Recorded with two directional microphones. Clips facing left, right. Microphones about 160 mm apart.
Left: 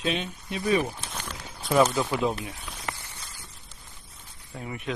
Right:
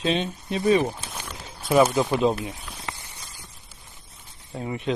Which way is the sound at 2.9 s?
15° right (ahead or behind).